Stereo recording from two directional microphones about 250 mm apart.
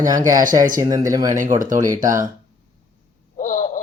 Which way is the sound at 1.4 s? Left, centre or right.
Right.